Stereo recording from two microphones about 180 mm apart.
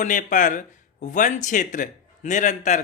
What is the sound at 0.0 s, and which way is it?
Speech, 45° left (ahead or behind).